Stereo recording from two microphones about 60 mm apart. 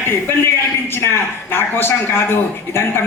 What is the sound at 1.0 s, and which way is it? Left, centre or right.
A man's voice, left.